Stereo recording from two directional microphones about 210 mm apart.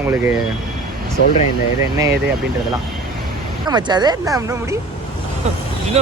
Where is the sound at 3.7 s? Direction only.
20° right (ahead or behind).